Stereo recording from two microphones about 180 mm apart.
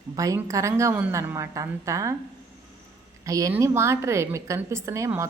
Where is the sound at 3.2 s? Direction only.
20° right (ahead or behind).